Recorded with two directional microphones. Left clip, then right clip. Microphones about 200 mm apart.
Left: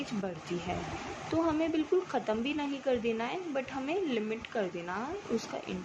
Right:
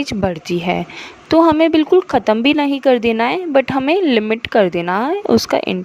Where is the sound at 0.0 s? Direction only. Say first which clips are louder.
Right 18 dB; 60° right (ahead or behind).